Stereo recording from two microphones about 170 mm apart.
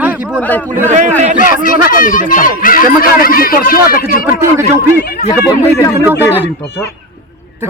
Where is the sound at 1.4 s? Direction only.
55° left (ahead or behind).